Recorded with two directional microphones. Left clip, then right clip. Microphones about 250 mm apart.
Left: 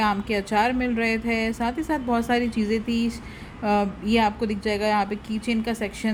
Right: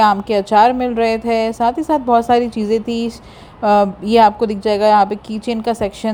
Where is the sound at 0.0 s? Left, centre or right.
Centre.